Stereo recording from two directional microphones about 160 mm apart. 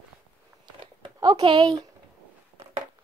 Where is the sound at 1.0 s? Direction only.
30° right (ahead or behind).